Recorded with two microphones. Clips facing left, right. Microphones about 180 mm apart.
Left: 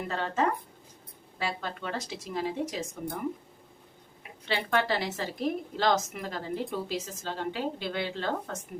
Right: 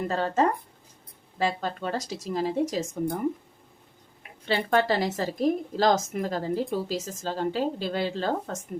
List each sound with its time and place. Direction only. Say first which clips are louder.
0.1 s a woman's voice: right 3 dB; 40° right (ahead or behind)
4.4 s a woman's voice: right 4 dB; 40° right (ahead or behind)